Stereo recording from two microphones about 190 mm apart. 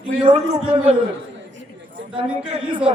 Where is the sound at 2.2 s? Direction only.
5° right (ahead or behind).